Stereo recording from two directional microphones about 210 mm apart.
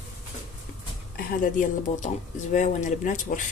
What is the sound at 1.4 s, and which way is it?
Speech, 35° left (ahead or behind).